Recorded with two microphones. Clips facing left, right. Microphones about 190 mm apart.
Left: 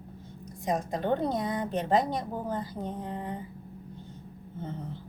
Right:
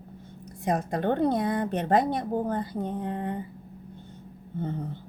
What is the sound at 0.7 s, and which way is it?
A woman's voice, 60° right (ahead or behind).